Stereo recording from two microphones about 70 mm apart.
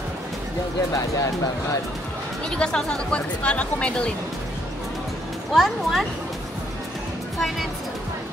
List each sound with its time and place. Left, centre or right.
0.9 s speech: left
2.5 s speech: centre
5.5 s speech: centre
7.3 s speech: centre